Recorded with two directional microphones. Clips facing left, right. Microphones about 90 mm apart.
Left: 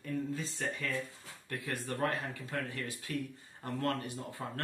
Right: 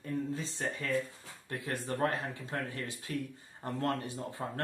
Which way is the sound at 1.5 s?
25° right (ahead or behind).